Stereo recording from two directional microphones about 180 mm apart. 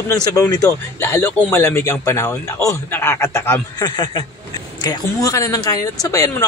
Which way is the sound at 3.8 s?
25° left (ahead or behind).